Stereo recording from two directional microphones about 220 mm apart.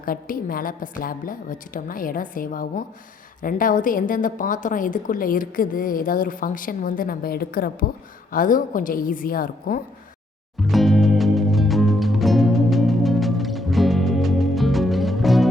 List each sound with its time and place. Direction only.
0.0 s a woman's voice: 40° left (ahead or behind)
10.6 s music: centre (ahead or behind)